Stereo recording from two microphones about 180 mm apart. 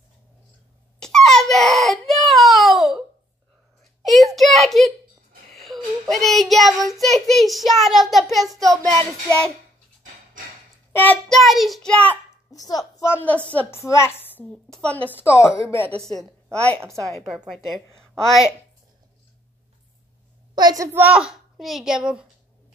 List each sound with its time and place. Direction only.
0.9 s babbling: 5° left (ahead or behind)
1.5 s baby cry: centre (ahead or behind)
4.0 s a sound: centre (ahead or behind)
5.5 s child singing: centre (ahead or behind)
8.5 s a child's voice: 20° right (ahead or behind)
8.8 s a child's voice: 5° left (ahead or behind)
11.0 s a child's voice: 5° left (ahead or behind)
12.4 s a child's voice: 20° left (ahead or behind); by 18.4 s centre (ahead or behind)
20.5 s a child's voice: 20° right (ahead or behind); by 22.3 s 5° right (ahead or behind)